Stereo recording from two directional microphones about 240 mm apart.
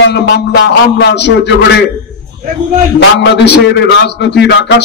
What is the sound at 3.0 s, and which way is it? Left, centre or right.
Speech, left.